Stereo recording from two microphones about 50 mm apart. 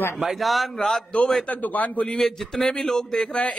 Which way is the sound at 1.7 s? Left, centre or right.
Left.